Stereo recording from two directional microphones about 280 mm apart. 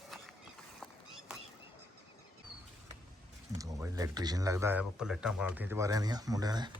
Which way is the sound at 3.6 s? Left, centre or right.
Centre.